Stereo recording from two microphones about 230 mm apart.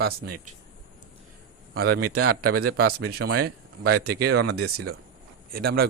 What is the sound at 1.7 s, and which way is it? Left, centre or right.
A man's voice, right.